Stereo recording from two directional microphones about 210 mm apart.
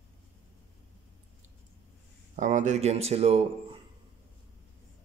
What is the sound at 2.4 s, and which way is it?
Speech, 35° right (ahead or behind).